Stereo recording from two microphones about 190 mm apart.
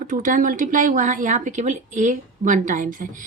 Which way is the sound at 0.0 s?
45° right (ahead or behind).